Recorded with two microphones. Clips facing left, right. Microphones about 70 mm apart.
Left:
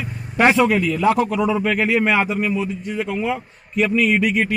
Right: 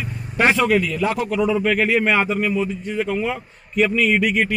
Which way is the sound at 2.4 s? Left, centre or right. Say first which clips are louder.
Right 1 dB; centre.